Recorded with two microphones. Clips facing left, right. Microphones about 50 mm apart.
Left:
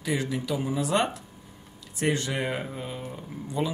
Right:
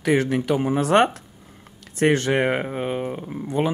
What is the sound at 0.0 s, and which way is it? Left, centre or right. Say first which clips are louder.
Speech: right 9 dB; right.